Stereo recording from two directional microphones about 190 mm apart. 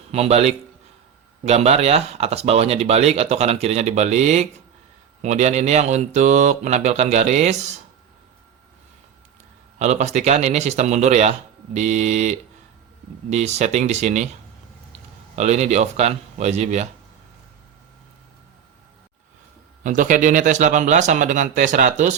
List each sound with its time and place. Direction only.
0.1 s speech: 35° right (ahead or behind)
9.7 s speech: 35° right (ahead or behind)
15.4 s speech: 35° right (ahead or behind)
19.8 s speech: 40° right (ahead or behind)